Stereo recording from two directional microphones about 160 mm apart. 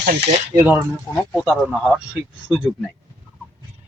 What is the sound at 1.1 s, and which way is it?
Speech, 5° left (ahead or behind).